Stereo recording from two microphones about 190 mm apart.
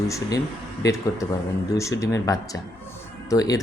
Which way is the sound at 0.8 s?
15° left (ahead or behind).